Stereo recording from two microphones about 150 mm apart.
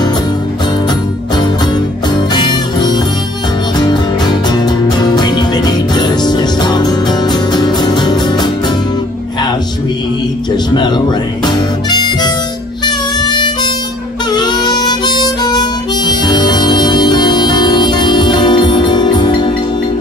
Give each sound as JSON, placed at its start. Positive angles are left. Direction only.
{"t": 2.1, "sound": "music", "side_deg": 30}
{"t": 10.7, "sound": "harmonica", "side_deg": 30}